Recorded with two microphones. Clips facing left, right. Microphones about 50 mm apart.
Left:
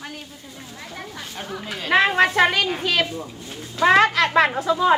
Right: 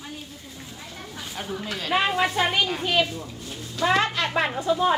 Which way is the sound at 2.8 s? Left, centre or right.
Left.